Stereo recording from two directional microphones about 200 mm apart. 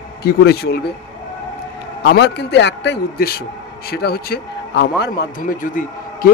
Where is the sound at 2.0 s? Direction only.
60° left (ahead or behind).